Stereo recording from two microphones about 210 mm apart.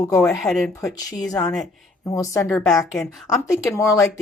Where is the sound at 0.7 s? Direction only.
15° left (ahead or behind).